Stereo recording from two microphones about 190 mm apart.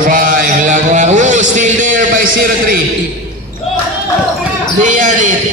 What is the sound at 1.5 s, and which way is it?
A man's voice, 40° right (ahead or behind).